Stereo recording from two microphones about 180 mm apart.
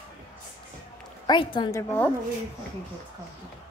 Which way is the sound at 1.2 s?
25° left (ahead or behind).